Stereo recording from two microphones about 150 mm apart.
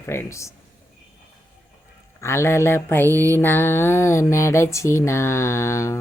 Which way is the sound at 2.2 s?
15° left (ahead or behind).